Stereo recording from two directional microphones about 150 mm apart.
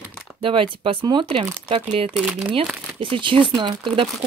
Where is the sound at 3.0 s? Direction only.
35° right (ahead or behind).